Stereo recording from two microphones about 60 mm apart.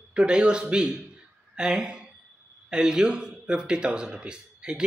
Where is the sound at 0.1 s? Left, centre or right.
Centre.